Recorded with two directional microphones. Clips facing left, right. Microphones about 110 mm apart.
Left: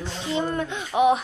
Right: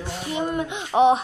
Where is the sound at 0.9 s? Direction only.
30° right (ahead or behind).